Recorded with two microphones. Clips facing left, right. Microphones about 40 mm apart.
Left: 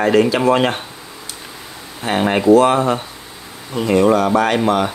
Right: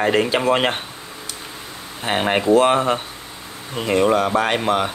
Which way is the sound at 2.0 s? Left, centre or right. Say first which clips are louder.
Left 3 dB; centre.